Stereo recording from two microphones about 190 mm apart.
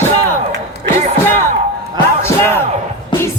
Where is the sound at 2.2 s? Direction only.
10° left (ahead or behind).